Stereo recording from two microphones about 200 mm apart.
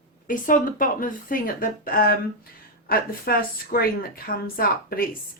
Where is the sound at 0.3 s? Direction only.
45° left (ahead or behind).